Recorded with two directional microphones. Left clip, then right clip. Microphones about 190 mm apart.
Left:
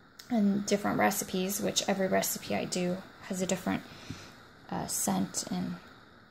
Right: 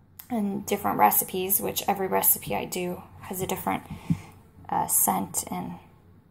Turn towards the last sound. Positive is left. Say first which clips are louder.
# right 5 dB
turn(degrees=40)  # may be behind; listen again after turning